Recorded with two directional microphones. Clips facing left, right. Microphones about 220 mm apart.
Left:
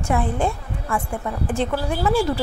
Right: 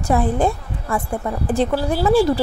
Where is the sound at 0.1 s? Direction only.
35° right (ahead or behind).